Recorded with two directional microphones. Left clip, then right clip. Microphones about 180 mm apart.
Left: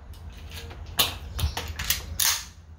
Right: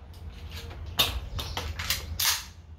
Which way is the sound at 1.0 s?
20° left (ahead or behind).